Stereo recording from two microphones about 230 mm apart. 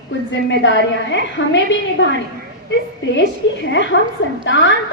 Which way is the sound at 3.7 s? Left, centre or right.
Left.